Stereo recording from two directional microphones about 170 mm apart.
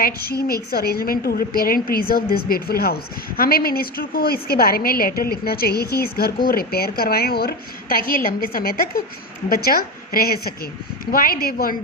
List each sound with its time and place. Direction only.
0.0 s a woman's voice: 65° left (ahead or behind)